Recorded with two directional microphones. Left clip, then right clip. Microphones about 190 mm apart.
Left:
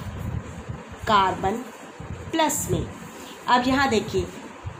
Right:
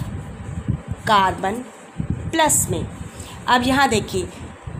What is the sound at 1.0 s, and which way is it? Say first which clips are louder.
A woman's voice: right 3 dB; 65° right (ahead or behind).